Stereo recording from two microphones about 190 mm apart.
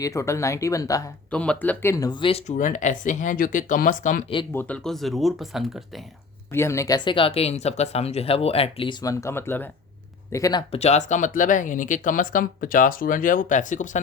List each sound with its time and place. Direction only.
0.0 s speech: 15° left (ahead or behind)
1.3 s speech: 5° left (ahead or behind); by 4.2 s 45° left (ahead or behind)
4.5 s speech: 5° left (ahead or behind)
6.5 s speech: 15° left (ahead or behind)
10.7 s speech: 35° left (ahead or behind)